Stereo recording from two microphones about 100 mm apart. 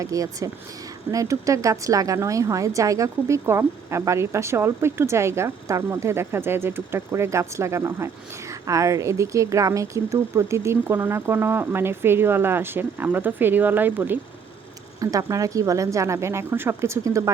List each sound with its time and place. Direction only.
0.0 s a woman's voice: 35° right (ahead or behind)
15.0 s a woman's voice: 35° right (ahead or behind)